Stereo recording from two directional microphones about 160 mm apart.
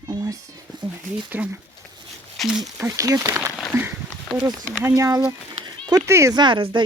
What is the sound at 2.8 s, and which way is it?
Speech, 20° right (ahead or behind).